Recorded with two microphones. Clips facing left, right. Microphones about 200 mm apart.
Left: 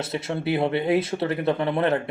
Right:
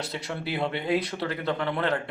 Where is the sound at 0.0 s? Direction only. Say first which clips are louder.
Left 6 dB; 25° left (ahead or behind).